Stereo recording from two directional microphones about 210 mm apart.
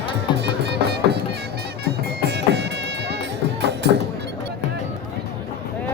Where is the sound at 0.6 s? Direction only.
50° right (ahead or behind).